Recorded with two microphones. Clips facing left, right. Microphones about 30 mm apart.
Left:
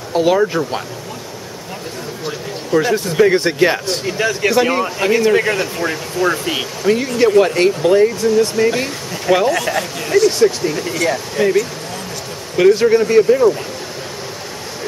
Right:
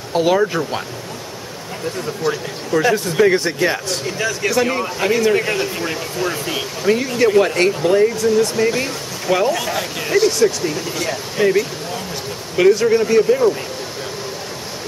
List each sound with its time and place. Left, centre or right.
0.1 s speech: centre
2.2 s speech: centre
3.3 s speech: left
5.6 s speech: centre
9.8 s speech: centre
10.4 s speech: centre
12.8 s speech: centre